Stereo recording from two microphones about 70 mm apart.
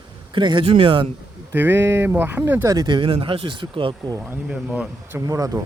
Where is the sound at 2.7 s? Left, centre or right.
Right.